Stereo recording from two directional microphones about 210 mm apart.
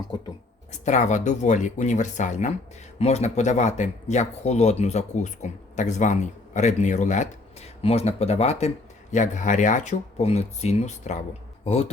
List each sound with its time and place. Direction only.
0.9 s speech: 35° left (ahead or behind)